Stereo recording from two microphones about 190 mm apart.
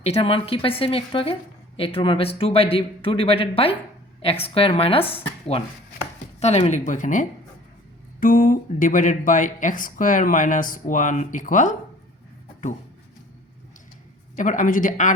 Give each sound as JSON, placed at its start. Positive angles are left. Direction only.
{"t": 0.0, "sound": "a woman's voice", "side_deg": 30}
{"t": 14.3, "sound": "speech", "side_deg": 45}